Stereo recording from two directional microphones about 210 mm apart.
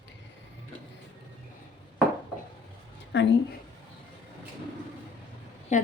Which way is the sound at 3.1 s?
60° left (ahead or behind).